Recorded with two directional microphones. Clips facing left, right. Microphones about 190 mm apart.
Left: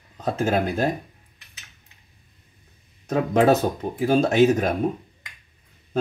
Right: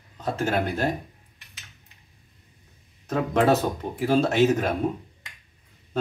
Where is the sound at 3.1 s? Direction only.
10° left (ahead or behind).